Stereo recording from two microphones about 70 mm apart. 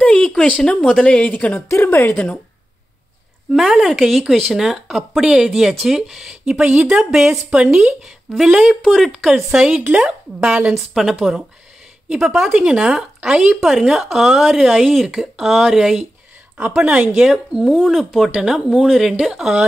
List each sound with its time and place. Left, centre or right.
0.0 s a sound: centre
0.8 s speech: centre
3.5 s speech: centre
8.8 s speech: centre
9.1 s speech: centre
10.7 s speech: centre
16.5 s speech: centre
17.7 s speech: centre
18.3 s speech: centre